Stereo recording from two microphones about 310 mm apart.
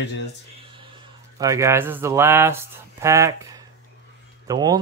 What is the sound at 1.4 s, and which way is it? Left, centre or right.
A man's voice, centre.